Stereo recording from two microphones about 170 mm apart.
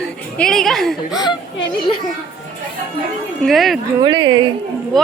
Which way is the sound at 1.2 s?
30° left (ahead or behind).